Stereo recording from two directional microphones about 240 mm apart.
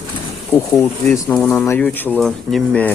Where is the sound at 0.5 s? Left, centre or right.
Centre.